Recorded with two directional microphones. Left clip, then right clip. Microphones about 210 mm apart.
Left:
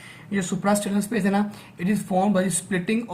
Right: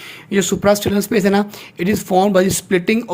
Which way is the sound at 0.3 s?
40° right (ahead or behind).